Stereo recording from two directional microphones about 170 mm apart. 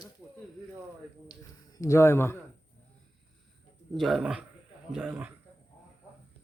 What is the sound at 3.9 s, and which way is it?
A man's voice, centre (ahead or behind).